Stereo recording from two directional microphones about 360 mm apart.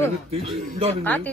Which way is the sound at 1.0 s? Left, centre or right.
Centre.